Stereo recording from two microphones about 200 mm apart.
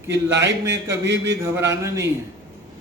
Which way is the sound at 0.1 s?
60° right (ahead or behind).